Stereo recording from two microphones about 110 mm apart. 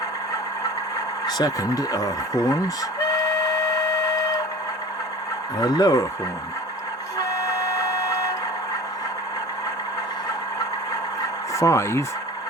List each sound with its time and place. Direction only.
1.4 s speech: 35° left (ahead or behind)
3.1 s printer: 30° left (ahead or behind)
5.5 s speech: 40° left (ahead or behind)
7.2 s printer: 30° left (ahead or behind)
11.5 s speech: 25° left (ahead or behind)